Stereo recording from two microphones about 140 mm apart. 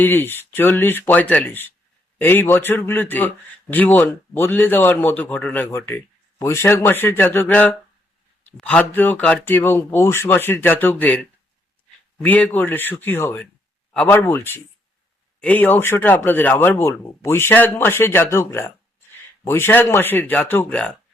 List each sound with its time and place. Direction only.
0.0 s a man's voice: 15° left (ahead or behind)